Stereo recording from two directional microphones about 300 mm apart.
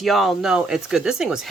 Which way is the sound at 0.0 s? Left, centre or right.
Centre.